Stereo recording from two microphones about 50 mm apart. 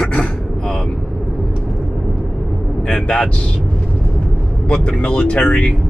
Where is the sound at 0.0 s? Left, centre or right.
Centre.